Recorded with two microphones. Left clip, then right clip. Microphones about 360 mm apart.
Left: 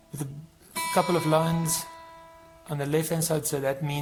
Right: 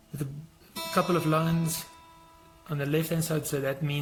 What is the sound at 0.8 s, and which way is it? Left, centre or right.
Speech, centre.